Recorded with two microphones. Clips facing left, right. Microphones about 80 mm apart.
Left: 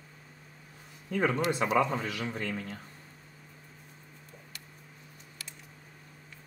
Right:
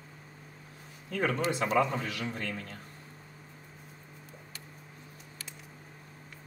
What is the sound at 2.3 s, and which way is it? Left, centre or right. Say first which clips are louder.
Speech: left 2 dB; centre.